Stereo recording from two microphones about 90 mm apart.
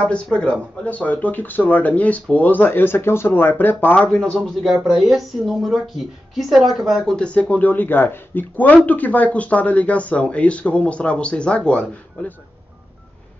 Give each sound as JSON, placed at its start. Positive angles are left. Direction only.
{"t": 0.0, "sound": "speech", "side_deg": 10}
{"t": 4.6, "sound": "a woman's voice", "side_deg": -5}
{"t": 7.2, "sound": "speech", "side_deg": 15}